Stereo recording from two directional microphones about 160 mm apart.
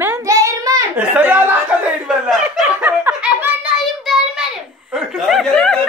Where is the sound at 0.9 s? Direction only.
10° right (ahead or behind).